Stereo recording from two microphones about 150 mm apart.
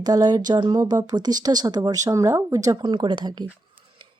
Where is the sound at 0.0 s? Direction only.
25° right (ahead or behind).